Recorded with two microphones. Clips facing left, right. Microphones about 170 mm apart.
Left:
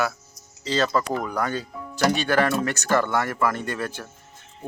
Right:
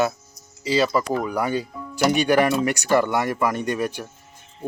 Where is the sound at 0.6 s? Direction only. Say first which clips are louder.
Right 3 dB; 10° right (ahead or behind).